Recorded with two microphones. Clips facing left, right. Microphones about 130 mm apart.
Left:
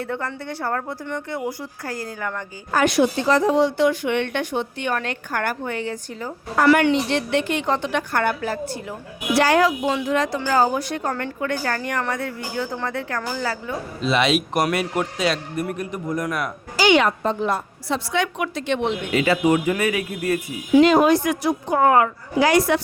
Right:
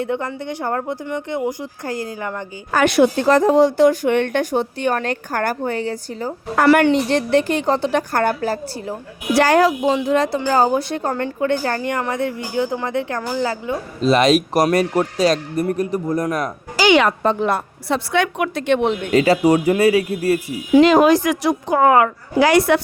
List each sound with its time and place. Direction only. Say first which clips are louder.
0.0 s speech: right 5 dB; 20° right (ahead or behind)
2.7 s a woman's voice: right 4 dB; 65° right (ahead or behind); by 13.7 s 20° right (ahead or behind)
14.0 s a woman's voice: right 6 dB; 40° right (ahead or behind)
16.7 s a woman's voice: right 3 dB; 90° right; by 18.9 s 55° right (ahead or behind)
19.1 s a woman's voice: right 4 dB; 40° right (ahead or behind)
20.8 s a woman's voice: right 4 dB; 90° right; by 22.8 s 65° right (ahead or behind)